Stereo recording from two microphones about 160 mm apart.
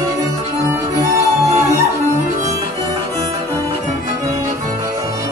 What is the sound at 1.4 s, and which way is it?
Music, 20° right (ahead or behind).